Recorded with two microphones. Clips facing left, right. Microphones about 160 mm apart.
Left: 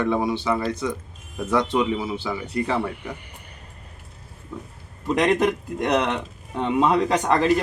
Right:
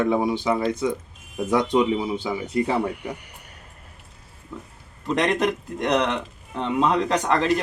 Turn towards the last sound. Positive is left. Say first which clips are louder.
# left 1 dB
turn(degrees=10)  # may be behind; listen again after turning